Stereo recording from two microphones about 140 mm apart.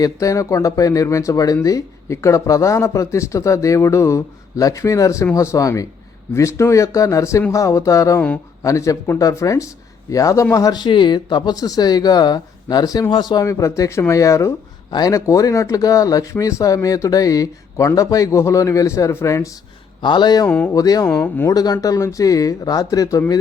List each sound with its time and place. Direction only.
0.0 s speech: 25° left (ahead or behind)
20.0 s speech: 35° left (ahead or behind)